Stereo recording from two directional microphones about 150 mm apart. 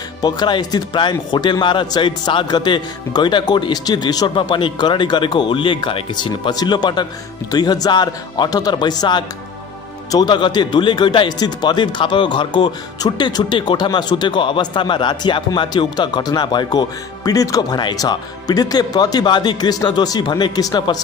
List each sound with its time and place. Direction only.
0.2 s a man's voice: 30° left (ahead or behind)